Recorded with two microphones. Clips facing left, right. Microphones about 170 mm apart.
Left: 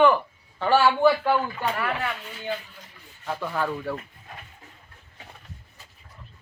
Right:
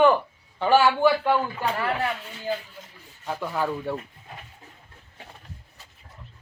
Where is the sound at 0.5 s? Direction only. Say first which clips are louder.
Right 1 dB; 15° right (ahead or behind).